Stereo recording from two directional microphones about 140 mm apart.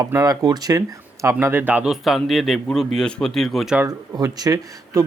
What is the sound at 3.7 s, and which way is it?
Speech, 25° right (ahead or behind).